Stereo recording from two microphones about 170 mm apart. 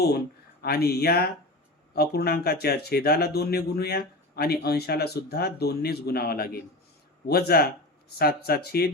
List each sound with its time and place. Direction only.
0.6 s speech: 65° left (ahead or behind)